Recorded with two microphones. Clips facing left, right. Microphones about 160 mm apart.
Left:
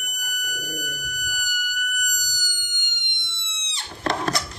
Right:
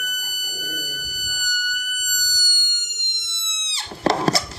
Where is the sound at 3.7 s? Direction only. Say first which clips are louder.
Right 5 dB; 30° right (ahead or behind).